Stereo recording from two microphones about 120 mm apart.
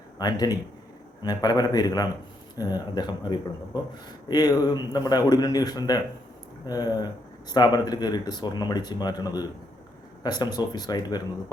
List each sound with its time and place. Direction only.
0.2 s speech: 35° left (ahead or behind)